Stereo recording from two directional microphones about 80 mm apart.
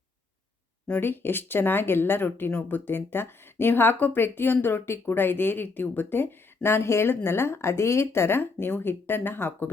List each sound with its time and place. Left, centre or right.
0.9 s speech: left